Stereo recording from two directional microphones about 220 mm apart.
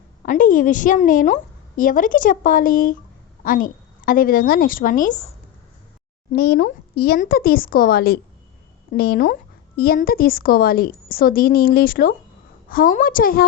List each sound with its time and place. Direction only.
0.3 s a woman's voice: 35° left (ahead or behind)
6.3 s a woman's voice: 45° left (ahead or behind)